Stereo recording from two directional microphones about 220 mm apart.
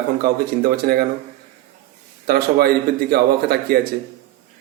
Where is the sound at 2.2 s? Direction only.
45° right (ahead or behind).